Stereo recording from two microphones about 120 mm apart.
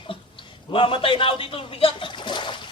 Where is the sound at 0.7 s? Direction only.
45° left (ahead or behind).